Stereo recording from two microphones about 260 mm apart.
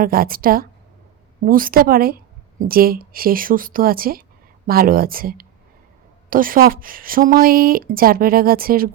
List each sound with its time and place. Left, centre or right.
0.0 s speech: right